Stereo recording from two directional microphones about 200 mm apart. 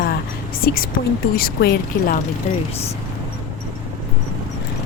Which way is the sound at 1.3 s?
50° left (ahead or behind).